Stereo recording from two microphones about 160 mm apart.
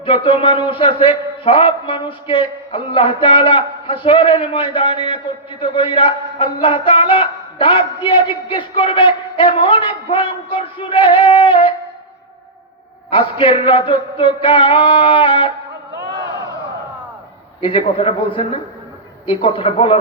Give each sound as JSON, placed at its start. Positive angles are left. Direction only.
{"t": 0.0, "sound": "a man's voice", "side_deg": 30}
{"t": 13.1, "sound": "a man's voice", "side_deg": 35}
{"t": 16.0, "sound": "a sound", "side_deg": -90}
{"t": 17.6, "sound": "a man's voice", "side_deg": 30}